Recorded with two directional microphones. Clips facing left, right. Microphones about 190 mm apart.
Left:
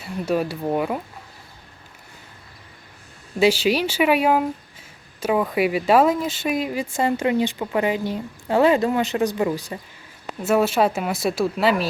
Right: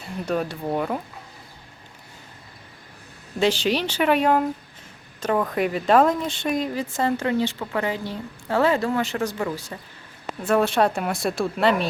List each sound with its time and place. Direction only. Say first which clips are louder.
0.0 s speech: left 3 dB; 5° left (ahead or behind)
3.4 s speech: left 3 dB; 10° left (ahead or behind)